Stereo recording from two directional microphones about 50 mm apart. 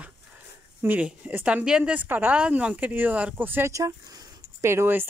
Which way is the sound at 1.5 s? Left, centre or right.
Right.